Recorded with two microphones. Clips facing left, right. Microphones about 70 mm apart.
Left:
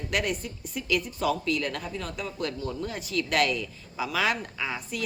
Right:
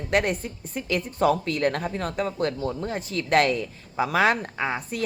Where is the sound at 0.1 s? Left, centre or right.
Right.